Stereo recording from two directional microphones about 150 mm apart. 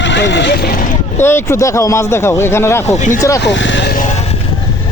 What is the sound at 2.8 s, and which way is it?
Speech, 50° left (ahead or behind).